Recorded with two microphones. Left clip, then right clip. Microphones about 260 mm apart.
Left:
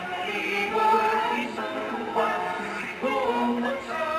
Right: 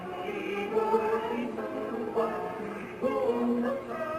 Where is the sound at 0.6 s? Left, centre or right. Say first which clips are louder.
Left 6 dB; centre.